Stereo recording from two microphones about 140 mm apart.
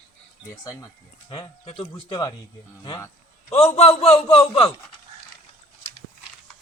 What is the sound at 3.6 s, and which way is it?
A man's voice, 45° left (ahead or behind).